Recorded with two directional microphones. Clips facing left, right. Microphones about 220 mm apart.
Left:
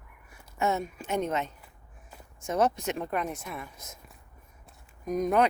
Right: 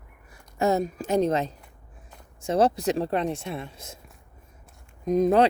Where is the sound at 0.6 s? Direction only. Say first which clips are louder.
Right 6 dB; 35° right (ahead or behind).